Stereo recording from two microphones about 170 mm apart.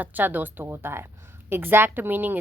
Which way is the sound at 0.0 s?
10° right (ahead or behind).